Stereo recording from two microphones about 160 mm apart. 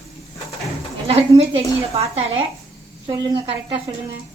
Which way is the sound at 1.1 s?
40° right (ahead or behind).